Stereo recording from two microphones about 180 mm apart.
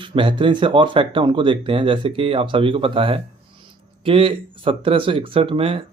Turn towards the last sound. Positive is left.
turn(degrees=-30)  # may be behind; listen again after turning